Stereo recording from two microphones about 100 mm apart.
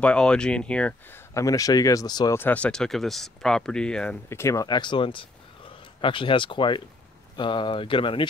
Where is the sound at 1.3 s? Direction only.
35° left (ahead or behind).